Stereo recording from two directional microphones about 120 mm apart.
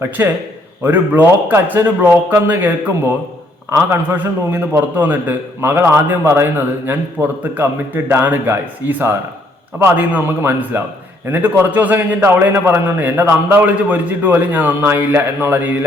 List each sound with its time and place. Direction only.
0.2 s a man's voice: 20° right (ahead or behind)